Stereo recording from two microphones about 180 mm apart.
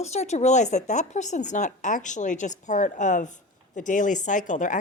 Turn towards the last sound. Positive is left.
turn(degrees=45)  # may be behind; listen again after turning